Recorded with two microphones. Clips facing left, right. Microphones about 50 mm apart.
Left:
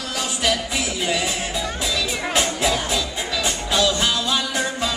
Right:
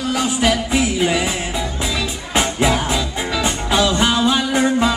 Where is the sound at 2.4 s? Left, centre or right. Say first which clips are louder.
Right 5 dB; centre.